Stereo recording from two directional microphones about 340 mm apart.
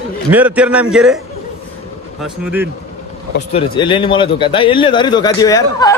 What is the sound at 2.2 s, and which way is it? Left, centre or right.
Speech, centre.